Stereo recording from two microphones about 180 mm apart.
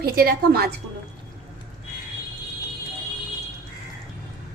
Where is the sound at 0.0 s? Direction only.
55° right (ahead or behind).